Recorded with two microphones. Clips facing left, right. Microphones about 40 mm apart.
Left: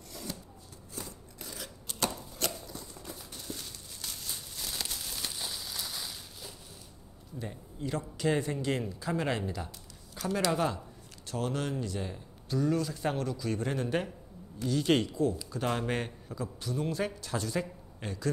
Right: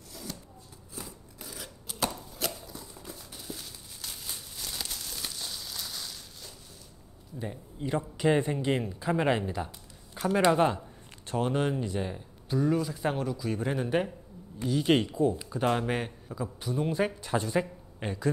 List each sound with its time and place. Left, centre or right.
0.1 s shuffling cards: centre
0.9 s chopping: centre
4.6 s a sound: centre
7.8 s a man's voice: right
15.8 s a man's voice: centre